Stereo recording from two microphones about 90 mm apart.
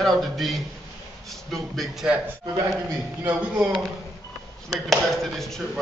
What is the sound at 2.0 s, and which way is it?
Speech, 15° right (ahead or behind).